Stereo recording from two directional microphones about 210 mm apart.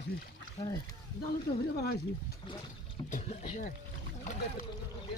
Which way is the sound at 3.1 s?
40° left (ahead or behind).